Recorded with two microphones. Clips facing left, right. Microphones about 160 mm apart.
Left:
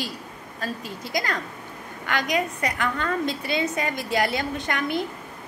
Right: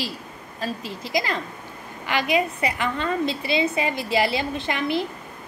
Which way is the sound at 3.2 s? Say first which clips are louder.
Right 2 dB; 45° left (ahead or behind).